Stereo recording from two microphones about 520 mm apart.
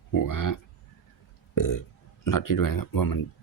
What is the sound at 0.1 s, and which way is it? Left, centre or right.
Speech, left.